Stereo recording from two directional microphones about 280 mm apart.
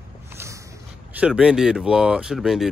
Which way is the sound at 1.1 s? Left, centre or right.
Centre.